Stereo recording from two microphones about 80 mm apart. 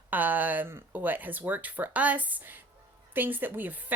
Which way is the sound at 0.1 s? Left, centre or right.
Right.